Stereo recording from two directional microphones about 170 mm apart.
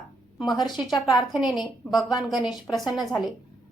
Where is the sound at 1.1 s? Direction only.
Centre (ahead or behind).